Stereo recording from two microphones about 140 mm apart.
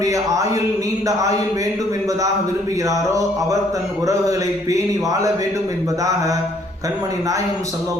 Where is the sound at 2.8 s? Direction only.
25° right (ahead or behind).